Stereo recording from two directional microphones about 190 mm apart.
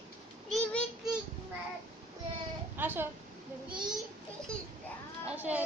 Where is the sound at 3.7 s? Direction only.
5° right (ahead or behind).